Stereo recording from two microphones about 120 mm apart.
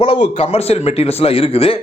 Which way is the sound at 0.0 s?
55° left (ahead or behind).